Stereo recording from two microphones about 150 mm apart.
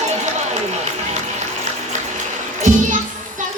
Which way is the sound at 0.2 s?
50° right (ahead or behind).